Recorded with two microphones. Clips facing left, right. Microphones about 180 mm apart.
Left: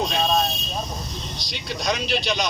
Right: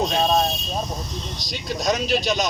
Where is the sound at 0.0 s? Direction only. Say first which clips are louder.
Right 3 dB; 45° right (ahead or behind).